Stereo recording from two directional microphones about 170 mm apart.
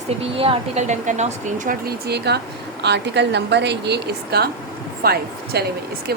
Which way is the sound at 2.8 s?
90° right.